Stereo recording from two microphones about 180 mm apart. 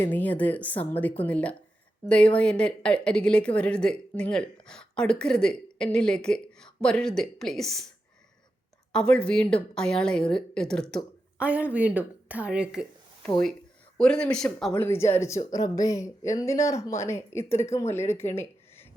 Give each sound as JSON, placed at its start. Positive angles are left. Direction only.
{"t": 0.0, "sound": "speech", "side_deg": 10}
{"t": 8.9, "sound": "speech", "side_deg": 5}
{"t": 11.3, "sound": "a woman's voice", "side_deg": -10}
{"t": 14.0, "sound": "speech", "side_deg": 5}
{"t": 18.1, "sound": "a sound", "side_deg": 15}